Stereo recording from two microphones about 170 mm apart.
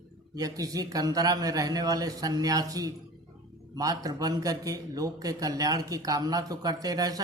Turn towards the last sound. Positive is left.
turn(degrees=-20)  # may be behind; listen again after turning